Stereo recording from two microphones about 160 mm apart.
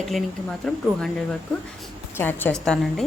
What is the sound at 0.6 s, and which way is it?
Speech, 5° left (ahead or behind).